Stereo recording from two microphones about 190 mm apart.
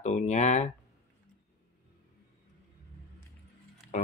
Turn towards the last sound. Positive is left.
turn(degrees=35)  # may be behind; listen again after turning